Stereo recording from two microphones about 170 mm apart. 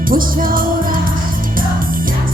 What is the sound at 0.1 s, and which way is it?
Music, 55° right (ahead or behind).